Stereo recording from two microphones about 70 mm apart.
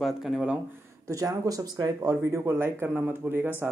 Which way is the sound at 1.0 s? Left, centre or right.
Right.